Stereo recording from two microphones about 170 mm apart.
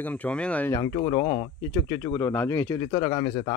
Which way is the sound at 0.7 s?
25° left (ahead or behind).